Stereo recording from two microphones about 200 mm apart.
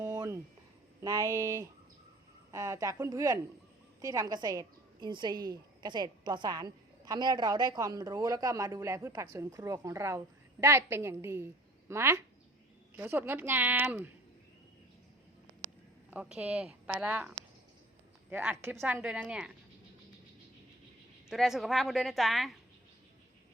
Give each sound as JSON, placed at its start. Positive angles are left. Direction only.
{"t": 0.0, "sound": "a sound", "side_deg": -15}
{"t": 1.0, "sound": "a woman's voice", "side_deg": -15}
{"t": 16.0, "sound": "a woman's voice", "side_deg": -5}
{"t": 21.2, "sound": "a woman's voice", "side_deg": 0}